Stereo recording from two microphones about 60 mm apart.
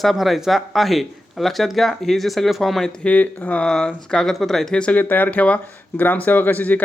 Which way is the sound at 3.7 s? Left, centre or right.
Centre.